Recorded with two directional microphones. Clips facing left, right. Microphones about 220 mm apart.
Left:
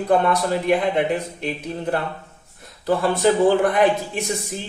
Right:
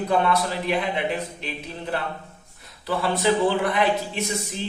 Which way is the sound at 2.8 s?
45° left (ahead or behind).